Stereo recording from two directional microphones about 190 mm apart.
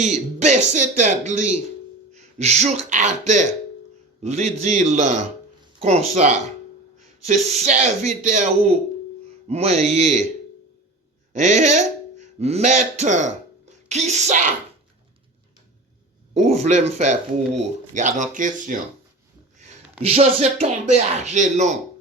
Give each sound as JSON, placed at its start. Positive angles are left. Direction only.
{"t": 0.0, "sound": "speech", "side_deg": -40}
{"t": 11.3, "sound": "speech", "side_deg": -40}
{"t": 13.7, "sound": "a sound", "side_deg": -35}
{"t": 16.3, "sound": "speech", "side_deg": -35}
{"t": 20.0, "sound": "speech", "side_deg": -30}